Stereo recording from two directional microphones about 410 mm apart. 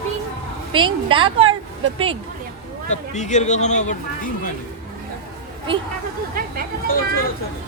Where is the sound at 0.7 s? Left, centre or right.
Centre.